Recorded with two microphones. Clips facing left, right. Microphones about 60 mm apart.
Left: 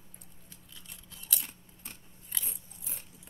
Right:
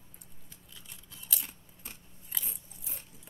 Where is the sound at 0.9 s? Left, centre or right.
Centre.